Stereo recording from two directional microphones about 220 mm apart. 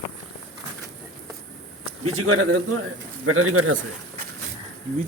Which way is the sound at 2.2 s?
70° right (ahead or behind).